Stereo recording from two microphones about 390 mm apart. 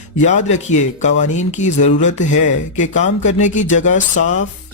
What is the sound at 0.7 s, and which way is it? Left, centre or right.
Speech, centre.